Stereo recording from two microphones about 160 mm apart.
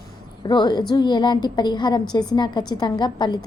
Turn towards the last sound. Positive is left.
turn(degrees=25)  # may be behind; listen again after turning